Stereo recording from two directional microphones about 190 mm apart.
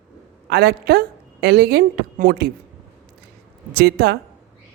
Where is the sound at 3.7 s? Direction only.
55° right (ahead or behind).